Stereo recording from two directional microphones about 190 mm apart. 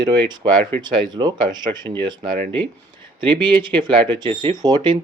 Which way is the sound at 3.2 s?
25° right (ahead or behind).